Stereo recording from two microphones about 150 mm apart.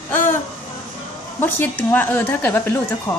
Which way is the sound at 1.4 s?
15° left (ahead or behind).